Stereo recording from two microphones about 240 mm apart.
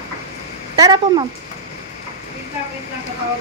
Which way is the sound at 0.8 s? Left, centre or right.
Centre.